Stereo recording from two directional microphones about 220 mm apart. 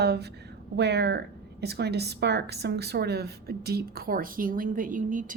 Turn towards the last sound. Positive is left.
turn(degrees=-35)  # may be behind; listen again after turning